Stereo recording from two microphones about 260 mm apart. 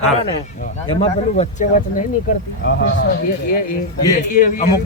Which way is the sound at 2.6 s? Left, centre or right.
Left.